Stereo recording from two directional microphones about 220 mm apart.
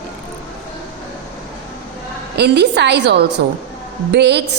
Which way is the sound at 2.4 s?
50° right (ahead or behind).